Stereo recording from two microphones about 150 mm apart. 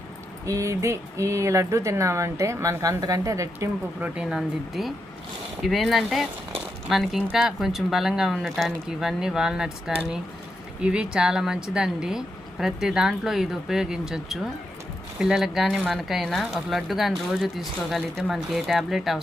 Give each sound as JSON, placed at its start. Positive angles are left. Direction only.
{"t": 0.4, "sound": "speech", "side_deg": -20}
{"t": 4.0, "sound": "speech", "side_deg": -5}